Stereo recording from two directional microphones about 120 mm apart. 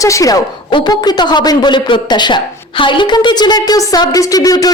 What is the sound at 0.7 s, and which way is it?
A woman's voice, 40° left (ahead or behind).